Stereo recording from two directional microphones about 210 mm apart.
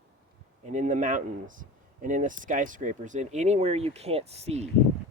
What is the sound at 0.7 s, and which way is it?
Speech, 35° right (ahead or behind).